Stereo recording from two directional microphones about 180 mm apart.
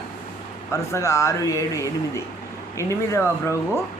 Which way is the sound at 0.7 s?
15° left (ahead or behind).